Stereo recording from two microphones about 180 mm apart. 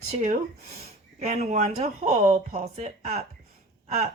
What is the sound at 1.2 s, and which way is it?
A woman's voice, 40° right (ahead or behind).